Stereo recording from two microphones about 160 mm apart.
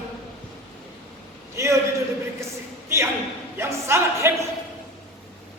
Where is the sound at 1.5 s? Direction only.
20° right (ahead or behind).